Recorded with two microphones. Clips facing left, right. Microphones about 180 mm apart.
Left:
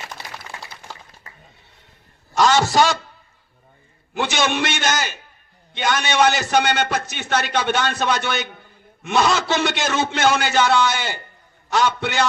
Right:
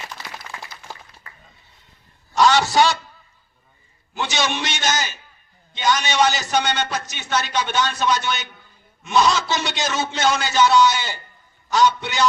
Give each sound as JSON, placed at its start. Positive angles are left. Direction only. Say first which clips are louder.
{"t": 2.4, "sound": "a man's voice", "louder": "even", "side_deg": 50}
{"t": 4.1, "sound": "a man's voice", "louder": "left 3 dB", "side_deg": 55}